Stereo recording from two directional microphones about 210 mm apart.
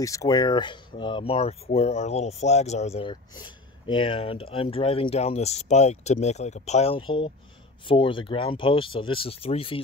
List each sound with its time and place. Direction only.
0.0 s speech: 15° left (ahead or behind)